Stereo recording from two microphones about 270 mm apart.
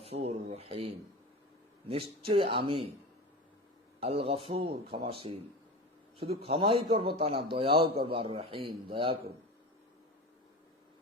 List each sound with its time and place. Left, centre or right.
0.0 s speech: right
1.9 s speech: right
4.0 s speech: right
6.1 s speech: right